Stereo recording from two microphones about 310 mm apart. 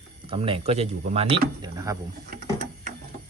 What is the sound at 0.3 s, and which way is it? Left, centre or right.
Speech, centre.